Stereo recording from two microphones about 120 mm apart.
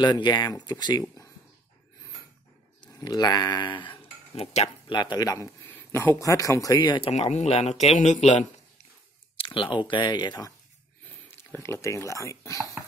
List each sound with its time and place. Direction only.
0.0 s speech: 35° left (ahead or behind)
2.9 s speech: 30° left (ahead or behind)
4.4 s speech: 55° left (ahead or behind)
4.8 s speech: 40° left (ahead or behind)
5.8 s speech: 20° left (ahead or behind)
7.0 s speech: 60° left (ahead or behind)
9.4 s a sound: 45° left (ahead or behind)
9.8 s speech: 40° left (ahead or behind)
11.2 s speech: 20° left (ahead or behind)